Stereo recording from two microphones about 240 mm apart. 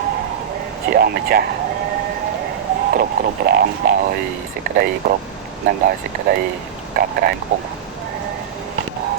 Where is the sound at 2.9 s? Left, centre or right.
Right.